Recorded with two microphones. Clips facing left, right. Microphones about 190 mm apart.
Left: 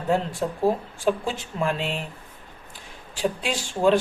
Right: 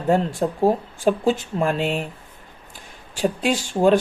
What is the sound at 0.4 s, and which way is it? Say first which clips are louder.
Speech: right 4 dB; 50° right (ahead or behind).